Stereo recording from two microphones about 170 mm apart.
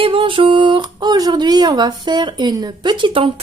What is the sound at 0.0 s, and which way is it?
Speech, 30° right (ahead or behind).